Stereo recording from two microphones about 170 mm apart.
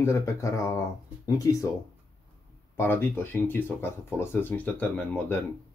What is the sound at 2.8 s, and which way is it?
Speech, 10° left (ahead or behind).